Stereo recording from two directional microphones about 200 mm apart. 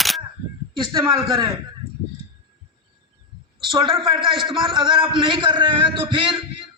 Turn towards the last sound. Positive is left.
turn(degrees=-25)  # may be behind; listen again after turning